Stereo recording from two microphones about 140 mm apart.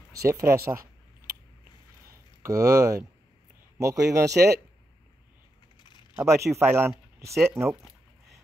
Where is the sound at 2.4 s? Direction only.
20° right (ahead or behind).